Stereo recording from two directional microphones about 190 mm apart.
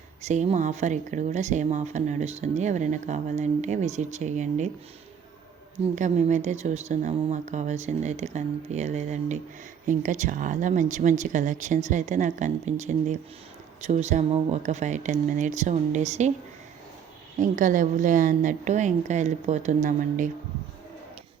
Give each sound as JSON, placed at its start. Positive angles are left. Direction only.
{"t": 0.2, "sound": "speech", "side_deg": -35}
{"t": 5.9, "sound": "speech", "side_deg": -40}
{"t": 17.4, "sound": "speech", "side_deg": -45}